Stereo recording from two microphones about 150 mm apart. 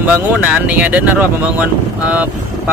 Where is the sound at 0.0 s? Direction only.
10° right (ahead or behind).